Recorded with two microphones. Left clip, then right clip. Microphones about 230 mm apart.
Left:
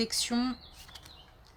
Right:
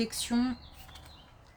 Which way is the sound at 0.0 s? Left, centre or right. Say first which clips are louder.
Left 1 dB; left.